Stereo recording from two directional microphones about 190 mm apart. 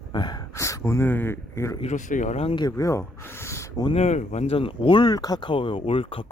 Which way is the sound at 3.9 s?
35° left (ahead or behind).